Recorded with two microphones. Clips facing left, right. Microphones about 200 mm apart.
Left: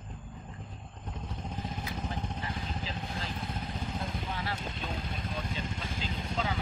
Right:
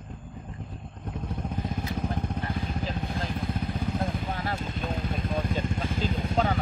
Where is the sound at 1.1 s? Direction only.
55° right (ahead or behind).